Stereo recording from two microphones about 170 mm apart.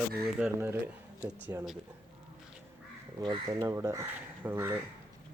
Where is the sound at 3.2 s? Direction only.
25° right (ahead or behind).